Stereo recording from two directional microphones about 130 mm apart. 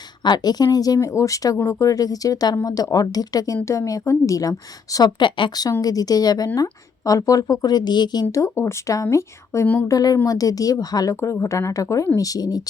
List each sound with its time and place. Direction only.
0.2 s speech: 35° left (ahead or behind); by 9.8 s 15° left (ahead or behind)
9.9 s speech: 30° left (ahead or behind)